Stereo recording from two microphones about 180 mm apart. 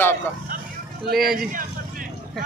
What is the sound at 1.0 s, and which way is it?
Speech, 60° right (ahead or behind).